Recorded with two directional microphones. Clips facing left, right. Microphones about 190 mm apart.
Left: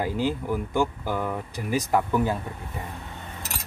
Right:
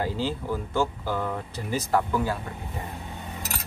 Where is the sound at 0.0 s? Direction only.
15° left (ahead or behind).